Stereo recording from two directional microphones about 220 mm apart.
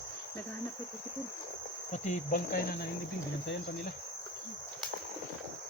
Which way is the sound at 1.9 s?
35° left (ahead or behind).